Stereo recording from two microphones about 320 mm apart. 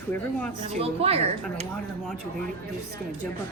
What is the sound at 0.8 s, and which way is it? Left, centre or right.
Speech, centre.